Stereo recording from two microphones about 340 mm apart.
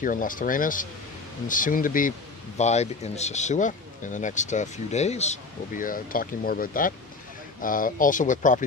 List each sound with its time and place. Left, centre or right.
0.0 s speech: left